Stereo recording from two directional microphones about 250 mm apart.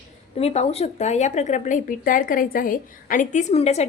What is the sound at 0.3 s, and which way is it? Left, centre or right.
Speech, left.